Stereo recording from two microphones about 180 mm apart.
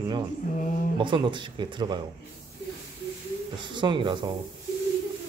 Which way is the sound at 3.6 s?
25° right (ahead or behind).